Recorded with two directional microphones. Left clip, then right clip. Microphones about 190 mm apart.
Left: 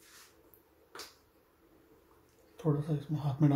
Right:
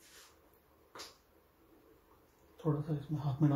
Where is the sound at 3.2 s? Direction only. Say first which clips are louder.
Left 3 dB; 25° left (ahead or behind).